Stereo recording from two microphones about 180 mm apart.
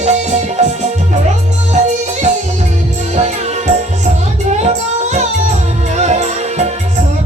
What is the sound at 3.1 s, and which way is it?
Music, 40° right (ahead or behind).